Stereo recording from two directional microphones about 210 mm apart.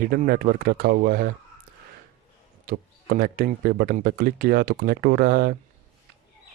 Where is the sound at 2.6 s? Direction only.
45° right (ahead or behind).